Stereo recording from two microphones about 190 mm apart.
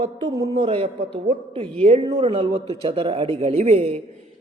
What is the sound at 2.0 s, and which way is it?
Speech, 25° right (ahead or behind).